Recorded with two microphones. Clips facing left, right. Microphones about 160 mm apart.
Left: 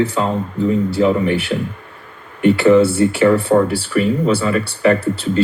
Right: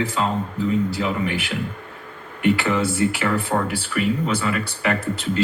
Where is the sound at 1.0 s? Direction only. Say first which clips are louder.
Left 9 dB; 35° left (ahead or behind).